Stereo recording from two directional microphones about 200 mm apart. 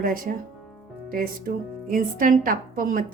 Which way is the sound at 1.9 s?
45° right (ahead or behind).